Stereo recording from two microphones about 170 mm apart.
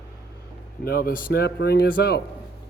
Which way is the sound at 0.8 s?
60° left (ahead or behind).